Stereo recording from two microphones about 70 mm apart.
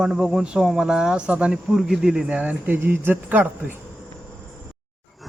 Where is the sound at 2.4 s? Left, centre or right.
Right.